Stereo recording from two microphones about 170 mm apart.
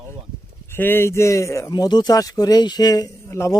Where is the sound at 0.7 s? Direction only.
10° left (ahead or behind).